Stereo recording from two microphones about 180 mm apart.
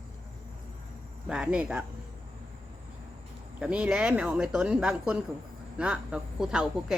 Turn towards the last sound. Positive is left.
turn(degrees=-5)  # may be behind; listen again after turning